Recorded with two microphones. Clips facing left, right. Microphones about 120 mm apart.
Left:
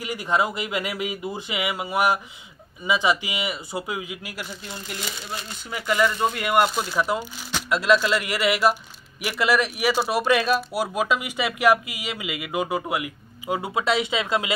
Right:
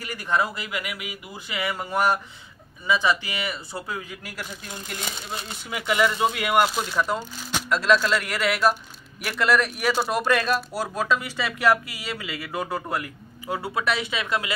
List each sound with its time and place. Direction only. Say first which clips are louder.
0.0 s speech: left 2 dB; 15° left (ahead or behind)
1.5 s speech: right 1 dB; 15° left (ahead or behind)
5.7 s speech: even; 5° right (ahead or behind); by 14.5 s 20° left (ahead or behind)